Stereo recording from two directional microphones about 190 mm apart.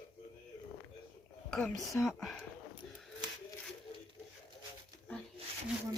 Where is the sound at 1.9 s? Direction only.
Centre (ahead or behind).